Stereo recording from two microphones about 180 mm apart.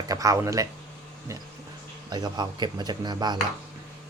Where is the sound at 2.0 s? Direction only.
20° right (ahead or behind).